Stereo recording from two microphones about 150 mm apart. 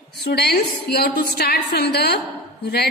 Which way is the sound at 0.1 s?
90° left.